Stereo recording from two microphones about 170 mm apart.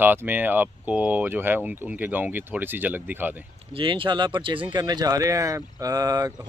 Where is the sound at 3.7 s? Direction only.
30° right (ahead or behind).